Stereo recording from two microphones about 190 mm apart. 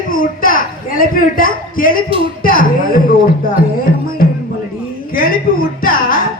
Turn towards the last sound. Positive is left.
turn(degrees=50)  # may be behind; listen again after turning